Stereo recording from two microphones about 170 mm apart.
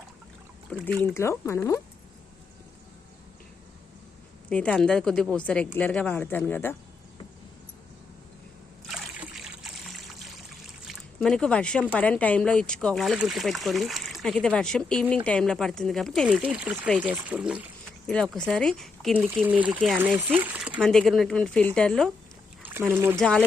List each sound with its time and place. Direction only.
0.7 s speech: 5° left (ahead or behind)
4.4 s speech: 5° left (ahead or behind)
8.9 s trickle: centre (ahead or behind)
11.9 s speech: 10° left (ahead or behind)
18.1 s speech: 5° left (ahead or behind)
19.3 s speech: 10° right (ahead or behind)
20.8 s speech: centre (ahead or behind)
22.6 s speech: 15° right (ahead or behind)
23.1 s speech: 5° left (ahead or behind)